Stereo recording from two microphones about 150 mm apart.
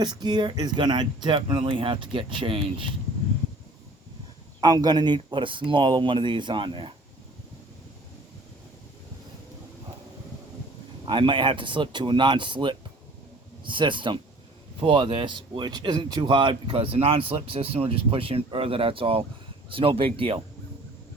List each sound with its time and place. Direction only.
0.0 s speech: 30° right (ahead or behind)
4.6 s speech: 25° right (ahead or behind)
11.0 s speech: 35° right (ahead or behind)